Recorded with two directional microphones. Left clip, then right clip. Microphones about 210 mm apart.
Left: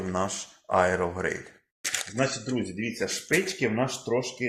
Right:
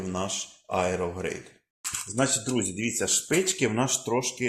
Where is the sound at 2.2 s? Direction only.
60° right (ahead or behind).